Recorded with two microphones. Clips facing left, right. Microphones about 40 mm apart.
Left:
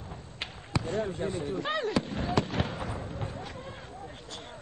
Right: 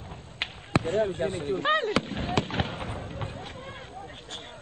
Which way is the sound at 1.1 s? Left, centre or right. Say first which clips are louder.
Right 3 dB; right.